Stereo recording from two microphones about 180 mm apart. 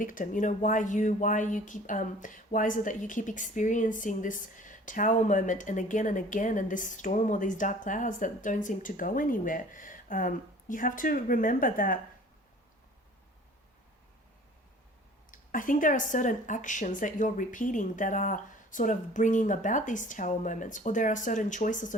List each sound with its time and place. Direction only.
0.0 s speech: 50° left (ahead or behind)
15.3 s speech: 45° left (ahead or behind)